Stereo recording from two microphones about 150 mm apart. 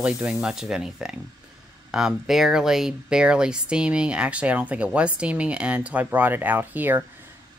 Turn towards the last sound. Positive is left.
turn(degrees=-15)  # may be behind; listen again after turning